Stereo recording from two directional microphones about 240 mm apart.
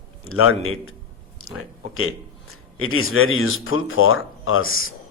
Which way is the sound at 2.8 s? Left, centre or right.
Left.